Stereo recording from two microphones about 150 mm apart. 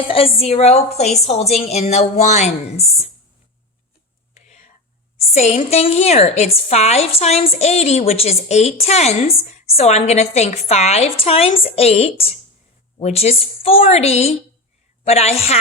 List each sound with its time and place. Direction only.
0.1 s a woman's voice: 40° left (ahead or behind)
4.4 s whispering: 50° left (ahead or behind)
5.3 s a woman's voice: 45° left (ahead or behind)